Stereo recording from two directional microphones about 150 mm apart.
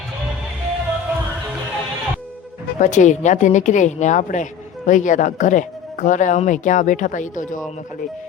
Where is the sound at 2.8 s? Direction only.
55° left (ahead or behind).